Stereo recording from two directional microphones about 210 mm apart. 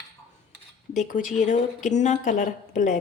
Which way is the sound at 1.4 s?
35° left (ahead or behind).